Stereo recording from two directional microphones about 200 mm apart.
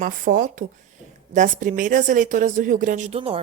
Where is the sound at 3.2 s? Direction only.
30° right (ahead or behind).